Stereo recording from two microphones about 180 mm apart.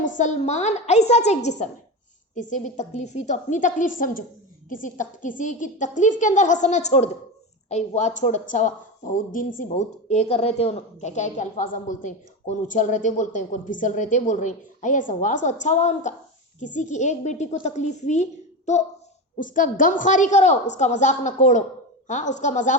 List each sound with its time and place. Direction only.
0.2 s a woman's voice: 40° left (ahead or behind)